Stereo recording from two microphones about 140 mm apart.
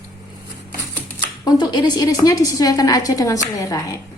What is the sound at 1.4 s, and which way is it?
A woman's voice, 30° left (ahead or behind).